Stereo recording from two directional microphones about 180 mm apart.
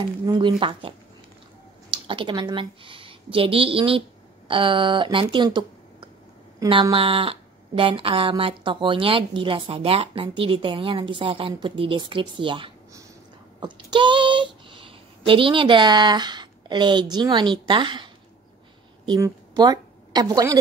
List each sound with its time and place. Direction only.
0.0 s a woman's voice: 25° right (ahead or behind)